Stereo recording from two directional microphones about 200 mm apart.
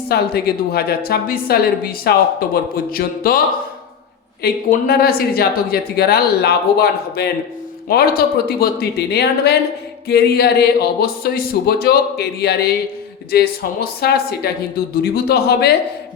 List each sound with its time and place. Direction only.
0.1 s speech: 50° left (ahead or behind)
4.4 s speech: 50° left (ahead or behind)